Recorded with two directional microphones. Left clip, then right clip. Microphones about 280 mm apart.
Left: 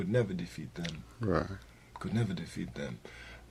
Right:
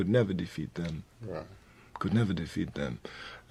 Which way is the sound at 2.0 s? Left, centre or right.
Right.